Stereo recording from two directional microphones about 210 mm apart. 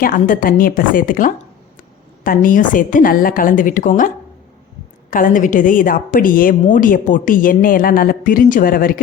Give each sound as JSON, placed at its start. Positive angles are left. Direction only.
{"t": 0.0, "sound": "a woman's voice", "side_deg": 40}
{"t": 5.1, "sound": "a woman's voice", "side_deg": 40}